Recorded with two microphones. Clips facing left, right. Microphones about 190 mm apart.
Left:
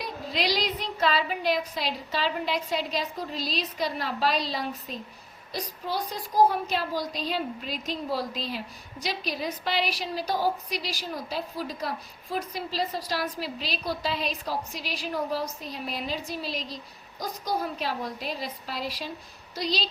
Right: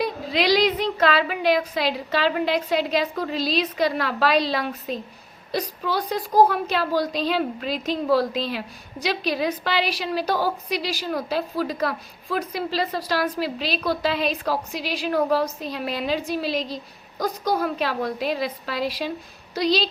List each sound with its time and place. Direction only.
0.3 s a woman's voice: 70° right (ahead or behind)
7.2 s a woman's voice: 90° right; by 19.9 s 70° right (ahead or behind)